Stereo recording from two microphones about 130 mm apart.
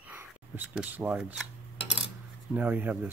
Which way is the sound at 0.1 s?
15° right (ahead or behind).